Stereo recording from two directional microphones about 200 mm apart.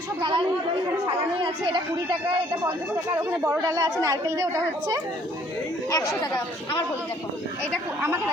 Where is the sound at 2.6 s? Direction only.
10° right (ahead or behind).